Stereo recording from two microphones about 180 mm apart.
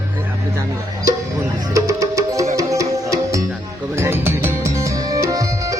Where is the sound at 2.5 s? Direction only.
20° right (ahead or behind).